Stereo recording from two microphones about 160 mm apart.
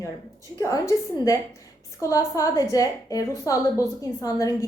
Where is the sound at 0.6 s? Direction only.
20° left (ahead or behind).